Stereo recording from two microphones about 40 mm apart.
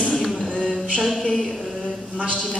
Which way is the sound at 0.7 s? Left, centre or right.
Centre.